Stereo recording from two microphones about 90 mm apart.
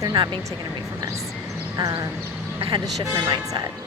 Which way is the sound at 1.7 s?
40° right (ahead or behind).